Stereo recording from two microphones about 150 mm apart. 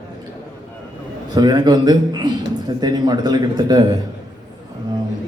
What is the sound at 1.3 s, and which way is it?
A man's voice, 25° right (ahead or behind).